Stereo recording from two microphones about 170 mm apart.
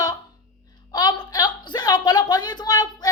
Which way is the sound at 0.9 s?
25° left (ahead or behind).